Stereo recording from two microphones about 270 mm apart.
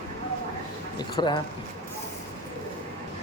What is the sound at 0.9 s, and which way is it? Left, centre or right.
Speech, centre.